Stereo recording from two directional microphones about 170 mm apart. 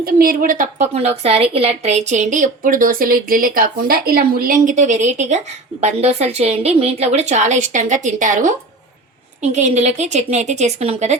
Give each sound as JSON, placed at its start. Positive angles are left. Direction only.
{"t": 0.0, "sound": "a woman's voice", "side_deg": -60}